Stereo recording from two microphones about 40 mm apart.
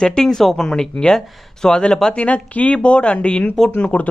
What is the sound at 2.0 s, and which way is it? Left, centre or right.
Speech, left.